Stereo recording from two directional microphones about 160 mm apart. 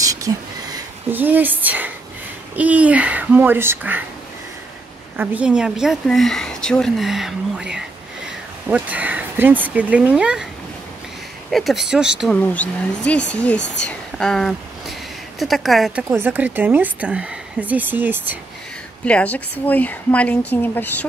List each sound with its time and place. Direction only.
0.0 s a sound: 20° right (ahead or behind)
1.1 s a woman's voice: 10° right (ahead or behind)
5.1 s a woman's voice: 10° right (ahead or behind)
11.5 s a woman's voice: centre (ahead or behind)
12.4 s a woman's voice: 10° left (ahead or behind); by 18.4 s 10° right (ahead or behind)
19.0 s speech: 10° left (ahead or behind)